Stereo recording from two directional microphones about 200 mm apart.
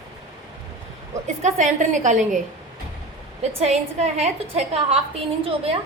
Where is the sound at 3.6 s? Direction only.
35° right (ahead or behind).